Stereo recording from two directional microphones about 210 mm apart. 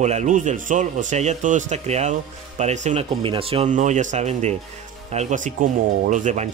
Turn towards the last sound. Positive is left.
turn(degrees=-35)  # may be behind; listen again after turning